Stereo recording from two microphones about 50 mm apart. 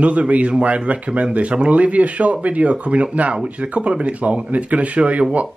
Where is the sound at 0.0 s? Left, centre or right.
Right.